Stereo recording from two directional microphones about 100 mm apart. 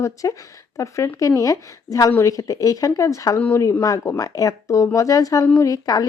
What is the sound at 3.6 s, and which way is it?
Speech, 30° left (ahead or behind).